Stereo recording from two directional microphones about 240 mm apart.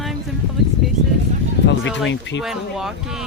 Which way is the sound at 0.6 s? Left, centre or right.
Centre.